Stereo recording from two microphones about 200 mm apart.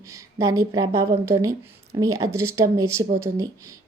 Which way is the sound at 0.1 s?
15° right (ahead or behind).